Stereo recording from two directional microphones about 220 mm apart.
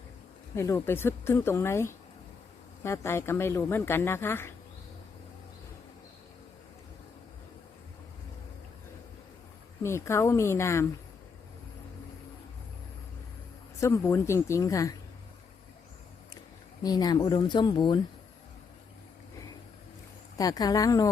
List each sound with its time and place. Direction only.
0.5 s speech: 10° left (ahead or behind)
9.8 s speech: 10° left (ahead or behind)
13.7 s speech: 15° left (ahead or behind)
16.8 s speech: 15° left (ahead or behind)
20.4 s speech: 15° left (ahead or behind)